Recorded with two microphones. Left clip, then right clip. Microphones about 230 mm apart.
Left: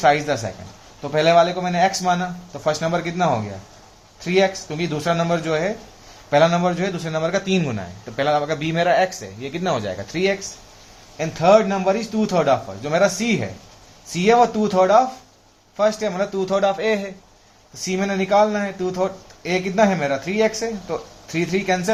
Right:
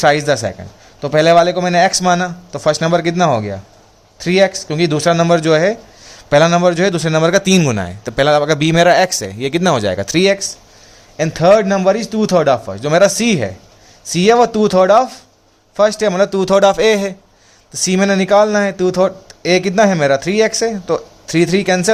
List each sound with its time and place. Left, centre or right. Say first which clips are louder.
0.0 s speech: right 5 dB; right